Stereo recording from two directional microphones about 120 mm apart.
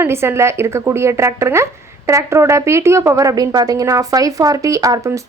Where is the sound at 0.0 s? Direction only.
20° right (ahead or behind).